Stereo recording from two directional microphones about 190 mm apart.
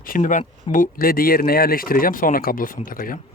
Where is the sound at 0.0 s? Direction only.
45° left (ahead or behind).